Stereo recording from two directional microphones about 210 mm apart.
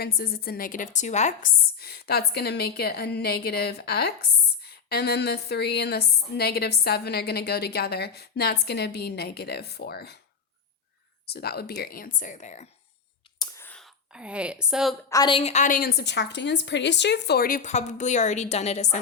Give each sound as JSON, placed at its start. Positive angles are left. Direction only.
{"t": 0.0, "sound": "a woman's voice", "side_deg": 45}
{"t": 11.3, "sound": "a woman's voice", "side_deg": 50}
{"t": 13.4, "sound": "a sound", "side_deg": 10}
{"t": 15.1, "sound": "a woman's voice", "side_deg": 20}